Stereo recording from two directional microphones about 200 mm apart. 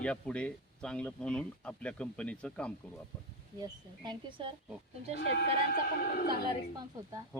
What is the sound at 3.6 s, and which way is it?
Speech, 20° right (ahead or behind).